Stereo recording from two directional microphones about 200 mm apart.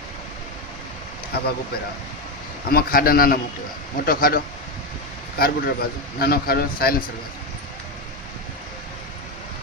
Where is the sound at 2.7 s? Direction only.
50° left (ahead or behind).